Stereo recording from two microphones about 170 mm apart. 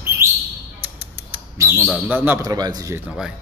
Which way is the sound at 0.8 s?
10° right (ahead or behind).